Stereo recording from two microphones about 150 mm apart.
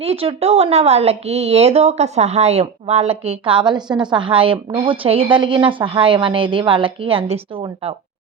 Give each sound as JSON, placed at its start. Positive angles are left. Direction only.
{"t": 0.0, "sound": "speech", "side_deg": -40}